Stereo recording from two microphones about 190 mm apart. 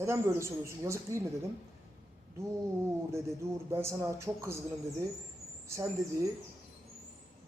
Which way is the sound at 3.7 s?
15° right (ahead or behind).